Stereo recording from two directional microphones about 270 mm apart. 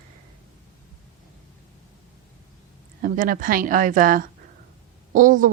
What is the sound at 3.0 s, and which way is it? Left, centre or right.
Speech, right.